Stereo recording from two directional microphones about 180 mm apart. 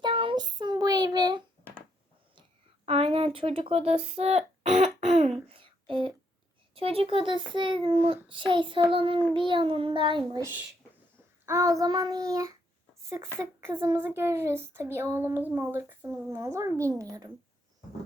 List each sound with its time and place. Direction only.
0.0 s child singing: 30° right (ahead or behind)
2.8 s speech: 30° right (ahead or behind)
4.9 s a sound: 35° right (ahead or behind)
6.7 s a child's voice: 30° right (ahead or behind)
11.4 s a child's voice: 15° right (ahead or behind)